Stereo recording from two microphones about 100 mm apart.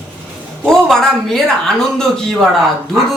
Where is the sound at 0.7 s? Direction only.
5° left (ahead or behind).